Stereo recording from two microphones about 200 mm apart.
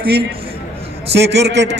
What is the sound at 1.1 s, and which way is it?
Speech, 55° right (ahead or behind).